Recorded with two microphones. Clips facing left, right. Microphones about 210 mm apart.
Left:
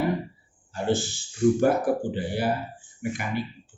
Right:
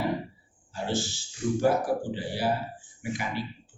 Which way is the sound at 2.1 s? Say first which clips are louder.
Left 2 dB; 55° left (ahead or behind).